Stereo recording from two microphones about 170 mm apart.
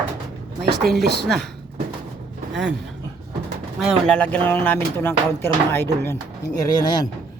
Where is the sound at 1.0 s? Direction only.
70° right (ahead or behind).